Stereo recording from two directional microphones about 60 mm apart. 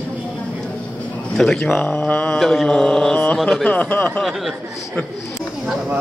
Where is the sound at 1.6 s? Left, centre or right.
Left.